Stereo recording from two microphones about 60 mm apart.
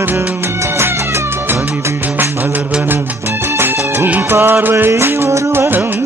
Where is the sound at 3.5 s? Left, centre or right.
Right.